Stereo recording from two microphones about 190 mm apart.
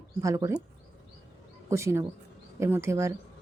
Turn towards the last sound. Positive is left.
turn(degrees=-15)  # may be behind; listen again after turning